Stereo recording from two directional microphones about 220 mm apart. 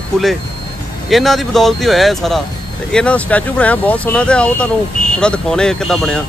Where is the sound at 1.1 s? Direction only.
Centre (ahead or behind).